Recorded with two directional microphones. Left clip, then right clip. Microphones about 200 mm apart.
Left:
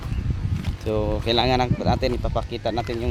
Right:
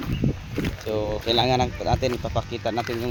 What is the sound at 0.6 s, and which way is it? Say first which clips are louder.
Speech: left 2 dB; 10° left (ahead or behind).